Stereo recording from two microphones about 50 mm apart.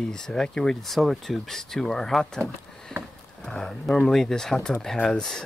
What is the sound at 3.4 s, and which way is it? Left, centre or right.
Speech, centre.